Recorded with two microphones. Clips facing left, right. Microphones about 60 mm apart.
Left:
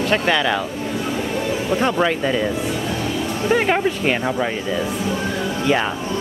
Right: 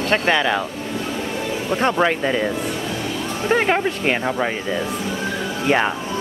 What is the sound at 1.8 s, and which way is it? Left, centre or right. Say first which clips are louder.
Speech: right 2 dB; centre.